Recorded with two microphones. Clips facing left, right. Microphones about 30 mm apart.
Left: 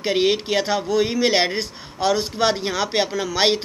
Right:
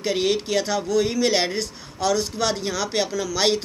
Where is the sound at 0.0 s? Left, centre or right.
Left.